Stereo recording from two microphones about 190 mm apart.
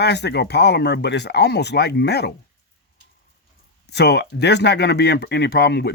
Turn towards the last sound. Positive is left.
turn(degrees=60)  # may be behind; listen again after turning